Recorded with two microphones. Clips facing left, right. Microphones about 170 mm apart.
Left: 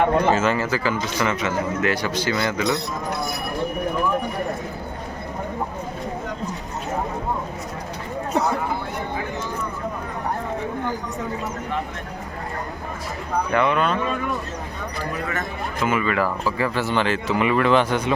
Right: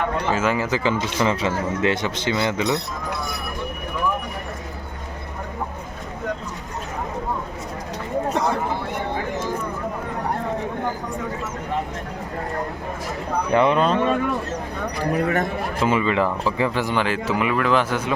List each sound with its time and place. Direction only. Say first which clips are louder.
0.3 s speech: even; 10° right (ahead or behind)
13.5 s speech: right 3 dB; 30° right (ahead or behind)
15.1 s speech: right 9 dB; 55° right (ahead or behind)
15.8 s speech: right 2 dB; 25° right (ahead or behind); by 18.1 s 5° right (ahead or behind)